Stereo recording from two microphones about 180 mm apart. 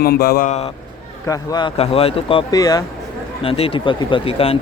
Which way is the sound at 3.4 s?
30° left (ahead or behind).